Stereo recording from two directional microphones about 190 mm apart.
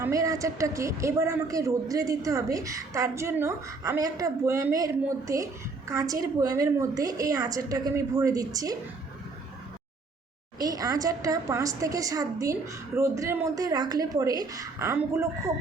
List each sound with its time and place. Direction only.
0.0 s a woman's voice: 15° right (ahead or behind)
10.6 s a woman's voice: 20° right (ahead or behind)